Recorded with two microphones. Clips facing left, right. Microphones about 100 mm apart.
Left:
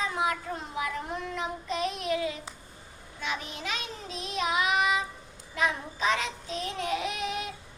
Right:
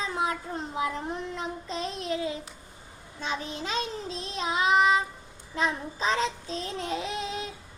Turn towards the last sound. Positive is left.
turn(degrees=-30)  # may be behind; listen again after turning